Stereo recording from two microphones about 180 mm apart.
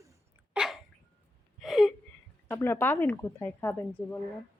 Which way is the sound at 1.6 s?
Centre (ahead or behind).